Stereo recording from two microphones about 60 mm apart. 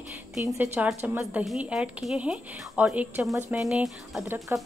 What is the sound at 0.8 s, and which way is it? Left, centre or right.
Speech, right.